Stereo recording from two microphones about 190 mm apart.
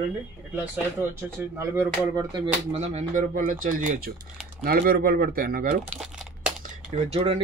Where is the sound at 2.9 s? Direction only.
40° right (ahead or behind).